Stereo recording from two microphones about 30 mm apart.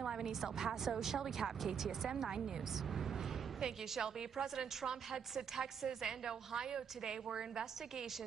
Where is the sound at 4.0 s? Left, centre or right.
Centre.